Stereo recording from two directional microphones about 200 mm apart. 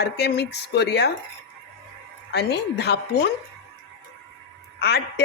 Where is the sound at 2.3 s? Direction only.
55° left (ahead or behind).